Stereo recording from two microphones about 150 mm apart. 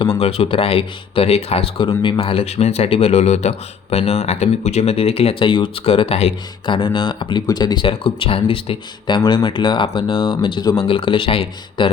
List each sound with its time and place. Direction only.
0.0 s speech: 40° left (ahead or behind)